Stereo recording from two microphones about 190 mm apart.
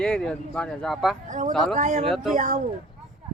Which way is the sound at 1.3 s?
40° right (ahead or behind).